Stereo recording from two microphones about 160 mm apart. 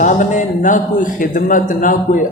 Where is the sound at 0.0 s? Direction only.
50° left (ahead or behind).